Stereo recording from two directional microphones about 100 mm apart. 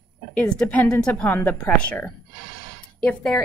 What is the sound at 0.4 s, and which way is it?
A woman's voice, 10° left (ahead or behind).